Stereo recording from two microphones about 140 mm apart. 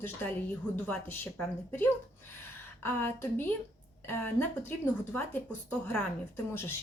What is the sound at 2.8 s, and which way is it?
A woman's voice, 15° left (ahead or behind).